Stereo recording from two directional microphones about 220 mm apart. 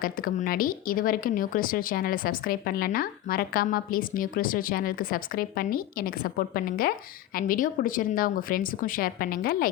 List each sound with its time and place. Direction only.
0.0 s speech: 40° left (ahead or behind)